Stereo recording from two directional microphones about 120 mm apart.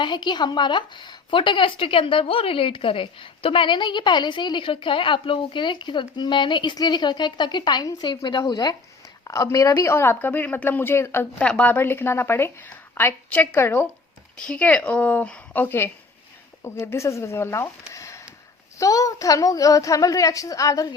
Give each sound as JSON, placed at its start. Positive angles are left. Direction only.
{"t": 0.0, "sound": "a woman's voice", "side_deg": 40}